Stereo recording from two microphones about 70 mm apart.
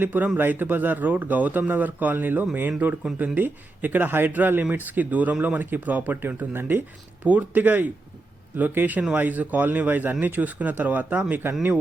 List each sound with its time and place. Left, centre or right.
0.0 s speech: right